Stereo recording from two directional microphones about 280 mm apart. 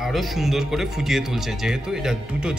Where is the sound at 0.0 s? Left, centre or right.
Centre.